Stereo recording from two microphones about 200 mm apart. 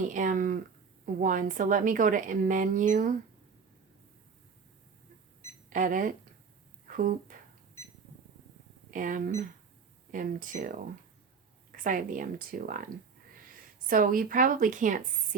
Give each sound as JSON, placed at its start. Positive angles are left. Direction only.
{"t": 0.1, "sound": "speech", "side_deg": -40}
{"t": 5.7, "sound": "speech", "side_deg": -40}
{"t": 8.9, "sound": "speech", "side_deg": -40}
{"t": 11.8, "sound": "a woman's voice", "side_deg": -40}